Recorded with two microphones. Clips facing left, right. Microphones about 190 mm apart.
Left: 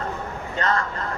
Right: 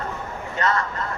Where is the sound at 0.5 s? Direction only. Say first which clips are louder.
Right 1 dB; 35° left (ahead or behind).